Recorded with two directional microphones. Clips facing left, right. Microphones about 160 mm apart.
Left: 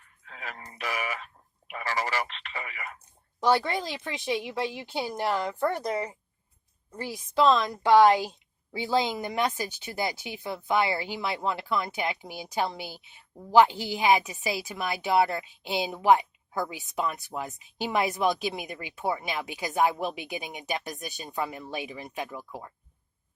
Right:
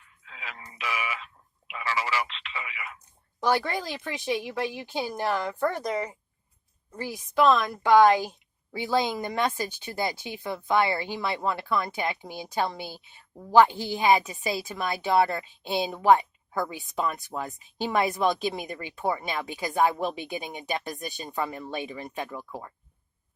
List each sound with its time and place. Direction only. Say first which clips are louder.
0.0 s speech: left 2 dB; 45° left (ahead or behind)
3.4 s speech: left 1 dB; 20° left (ahead or behind)